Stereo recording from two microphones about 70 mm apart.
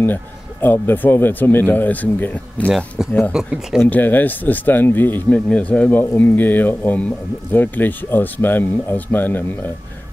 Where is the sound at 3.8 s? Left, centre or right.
Left.